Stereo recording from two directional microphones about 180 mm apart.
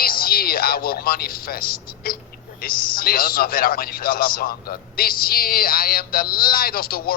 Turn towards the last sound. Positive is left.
turn(degrees=55)  # may be behind; listen again after turning